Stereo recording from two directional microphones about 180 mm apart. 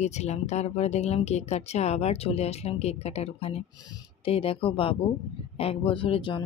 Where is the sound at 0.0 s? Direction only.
40° left (ahead or behind).